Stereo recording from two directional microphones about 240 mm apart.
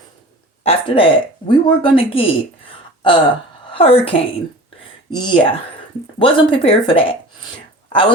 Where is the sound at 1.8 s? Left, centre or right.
Left.